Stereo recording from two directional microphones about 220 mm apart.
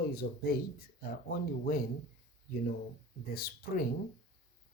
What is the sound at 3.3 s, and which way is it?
Speech, 45° left (ahead or behind).